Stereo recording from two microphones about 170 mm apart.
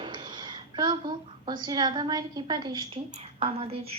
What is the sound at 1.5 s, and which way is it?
A woman's voice, 25° right (ahead or behind).